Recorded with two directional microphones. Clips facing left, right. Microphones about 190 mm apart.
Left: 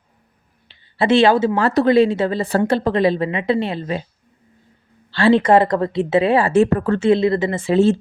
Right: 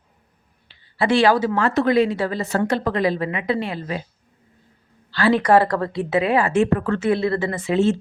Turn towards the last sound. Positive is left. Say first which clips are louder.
# left 4 dB
turn(degrees=35)  # may be behind; listen again after turning